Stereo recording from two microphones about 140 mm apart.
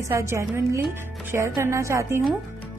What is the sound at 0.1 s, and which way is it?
A woman's voice, 20° right (ahead or behind).